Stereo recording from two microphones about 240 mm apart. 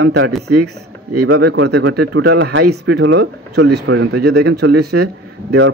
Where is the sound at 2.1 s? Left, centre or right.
Right.